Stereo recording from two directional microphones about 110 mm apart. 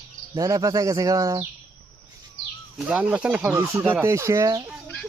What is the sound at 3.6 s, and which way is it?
Speech, 30° right (ahead or behind).